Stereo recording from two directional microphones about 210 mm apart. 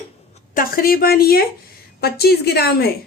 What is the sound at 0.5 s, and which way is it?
Speech, 45° left (ahead or behind).